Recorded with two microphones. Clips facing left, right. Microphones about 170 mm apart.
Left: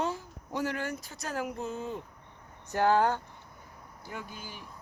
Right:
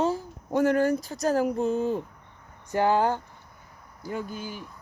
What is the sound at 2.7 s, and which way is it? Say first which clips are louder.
Speech: right 2 dB; 10° right (ahead or behind).